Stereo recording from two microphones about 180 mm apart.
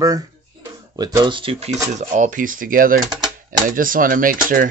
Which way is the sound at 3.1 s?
25° right (ahead or behind).